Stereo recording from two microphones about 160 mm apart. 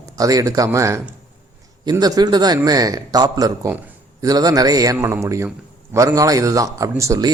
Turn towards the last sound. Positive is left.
turn(degrees=-20)  # may be behind; listen again after turning